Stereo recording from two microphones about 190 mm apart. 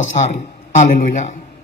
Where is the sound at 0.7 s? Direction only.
40° left (ahead or behind).